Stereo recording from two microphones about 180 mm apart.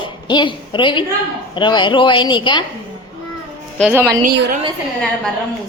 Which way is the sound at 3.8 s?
10° right (ahead or behind).